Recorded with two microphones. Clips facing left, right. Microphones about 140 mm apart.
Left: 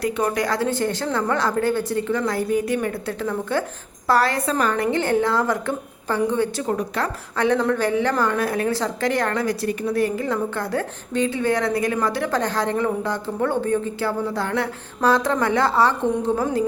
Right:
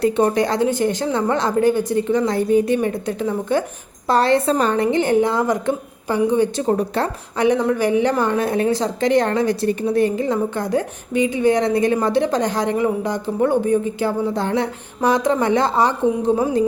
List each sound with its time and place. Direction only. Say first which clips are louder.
0.0 s a woman's voice: right 5 dB; 30° right (ahead or behind)
6.6 s speech: right 5 dB; 30° right (ahead or behind)
7.3 s a woman's voice: right 3 dB; 15° right (ahead or behind)